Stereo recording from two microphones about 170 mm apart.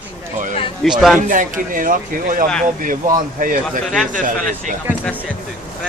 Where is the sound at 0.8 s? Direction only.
5° right (ahead or behind).